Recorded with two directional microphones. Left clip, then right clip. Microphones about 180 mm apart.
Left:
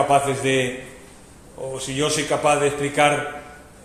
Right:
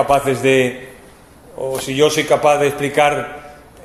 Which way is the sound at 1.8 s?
50° right (ahead or behind).